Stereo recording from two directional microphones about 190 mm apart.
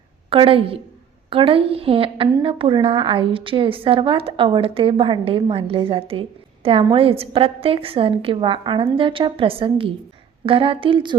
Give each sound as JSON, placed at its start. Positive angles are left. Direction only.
{"t": 0.3, "sound": "a woman's voice", "side_deg": -30}